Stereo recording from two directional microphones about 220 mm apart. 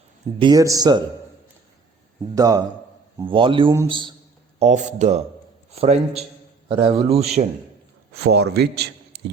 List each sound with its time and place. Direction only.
0.3 s speech: 20° right (ahead or behind)
2.3 s speech: 15° right (ahead or behind)
4.6 s speech: 35° right (ahead or behind)
6.7 s speech: 25° right (ahead or behind)
8.2 s a man's voice: 50° right (ahead or behind)